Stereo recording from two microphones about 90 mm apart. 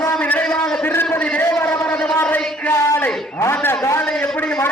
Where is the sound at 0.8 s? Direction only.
25° left (ahead or behind).